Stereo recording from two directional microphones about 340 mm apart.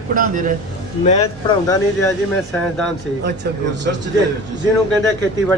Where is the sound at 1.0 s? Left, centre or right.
Centre.